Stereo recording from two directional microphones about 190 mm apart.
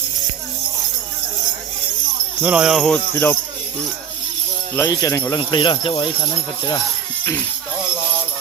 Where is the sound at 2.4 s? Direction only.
5° right (ahead or behind); by 3.3 s 10° left (ahead or behind).